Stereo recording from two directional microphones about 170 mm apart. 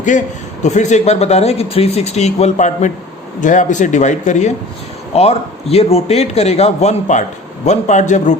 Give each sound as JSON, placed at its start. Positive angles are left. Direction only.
{"t": 0.1, "sound": "a man's voice", "side_deg": 45}